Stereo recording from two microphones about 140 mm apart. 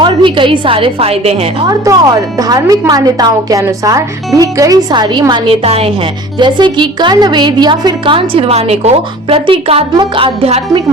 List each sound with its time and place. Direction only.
0.0 s a woman's voice: 35° right (ahead or behind)
1.6 s a woman's voice: 25° right (ahead or behind)
5.3 s a woman's voice: 45° right (ahead or behind)
6.4 s a woman's voice: 35° right (ahead or behind)